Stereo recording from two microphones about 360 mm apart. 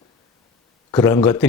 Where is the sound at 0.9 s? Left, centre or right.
Centre.